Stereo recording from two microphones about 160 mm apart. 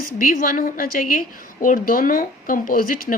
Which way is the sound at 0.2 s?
60° left (ahead or behind).